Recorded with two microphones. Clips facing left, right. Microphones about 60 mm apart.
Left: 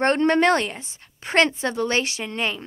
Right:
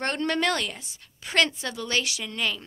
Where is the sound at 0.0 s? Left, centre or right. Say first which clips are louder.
Left 8 dB; left.